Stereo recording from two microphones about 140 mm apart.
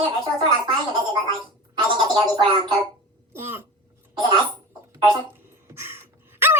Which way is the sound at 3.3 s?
15° right (ahead or behind).